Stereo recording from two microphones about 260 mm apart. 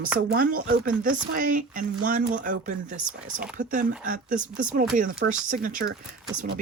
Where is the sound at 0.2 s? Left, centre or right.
Right.